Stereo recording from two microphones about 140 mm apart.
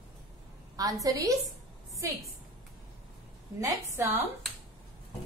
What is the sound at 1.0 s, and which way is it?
Speech, 25° right (ahead or behind).